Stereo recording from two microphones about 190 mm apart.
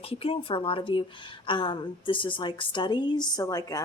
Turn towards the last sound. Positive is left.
turn(degrees=20)  # may be behind; listen again after turning